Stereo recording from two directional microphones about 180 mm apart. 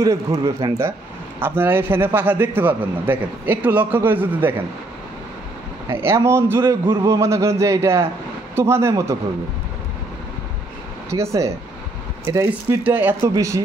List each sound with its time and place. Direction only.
0.0 s speech: 20° right (ahead or behind)
1.4 s a man's voice: 10° right (ahead or behind)
5.9 s a man's voice: 15° right (ahead or behind)
11.1 s a man's voice: 15° right (ahead or behind)